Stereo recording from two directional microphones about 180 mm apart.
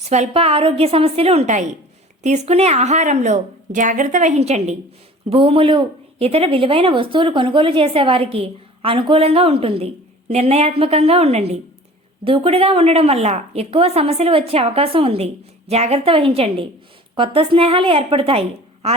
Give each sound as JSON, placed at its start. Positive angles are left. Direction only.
{"t": 0.1, "sound": "speech", "side_deg": -35}